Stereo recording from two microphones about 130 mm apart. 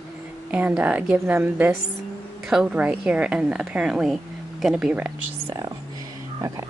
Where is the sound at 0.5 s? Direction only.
10° right (ahead or behind).